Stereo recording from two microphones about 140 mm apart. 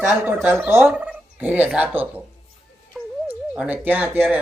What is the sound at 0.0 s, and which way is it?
Speech, 20° right (ahead or behind).